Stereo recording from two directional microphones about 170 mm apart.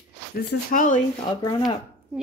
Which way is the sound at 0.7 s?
50° left (ahead or behind).